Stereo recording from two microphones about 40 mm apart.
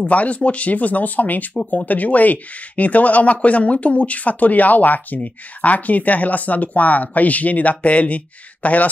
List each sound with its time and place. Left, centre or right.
0.0 s speech: left